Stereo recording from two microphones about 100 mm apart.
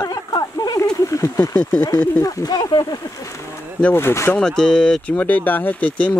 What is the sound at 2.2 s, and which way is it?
Speech, 40° left (ahead or behind).